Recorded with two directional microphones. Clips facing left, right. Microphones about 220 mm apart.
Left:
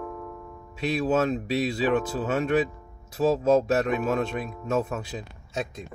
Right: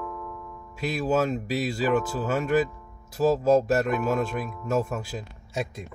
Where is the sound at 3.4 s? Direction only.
Centre (ahead or behind).